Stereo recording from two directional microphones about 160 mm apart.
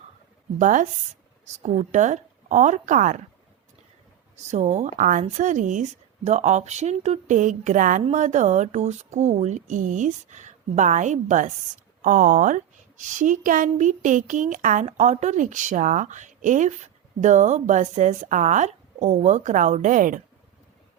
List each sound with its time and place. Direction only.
0.6 s speech: 55° right (ahead or behind)
4.5 s speech: 45° right (ahead or behind)